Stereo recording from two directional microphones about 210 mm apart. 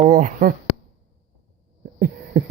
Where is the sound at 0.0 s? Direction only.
35° right (ahead or behind).